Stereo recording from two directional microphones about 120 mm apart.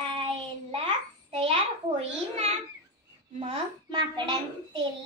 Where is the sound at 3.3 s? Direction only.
45° right (ahead or behind).